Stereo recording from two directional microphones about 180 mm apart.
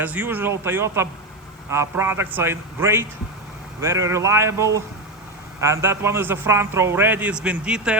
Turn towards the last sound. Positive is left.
turn(degrees=-5)  # may be behind; listen again after turning